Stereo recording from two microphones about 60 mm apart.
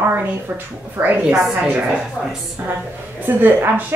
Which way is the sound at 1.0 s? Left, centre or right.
Right.